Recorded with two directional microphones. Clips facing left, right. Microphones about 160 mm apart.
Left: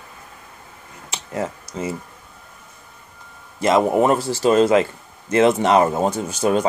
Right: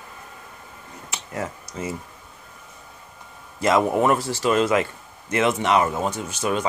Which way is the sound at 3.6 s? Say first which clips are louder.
Left 3 dB; 25° left (ahead or behind).